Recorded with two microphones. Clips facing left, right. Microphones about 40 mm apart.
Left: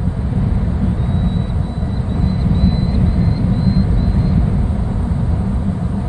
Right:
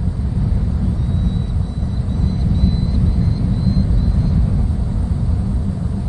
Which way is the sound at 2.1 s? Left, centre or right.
Left.